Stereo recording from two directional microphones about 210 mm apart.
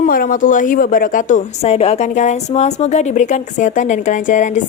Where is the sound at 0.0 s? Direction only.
40° left (ahead or behind).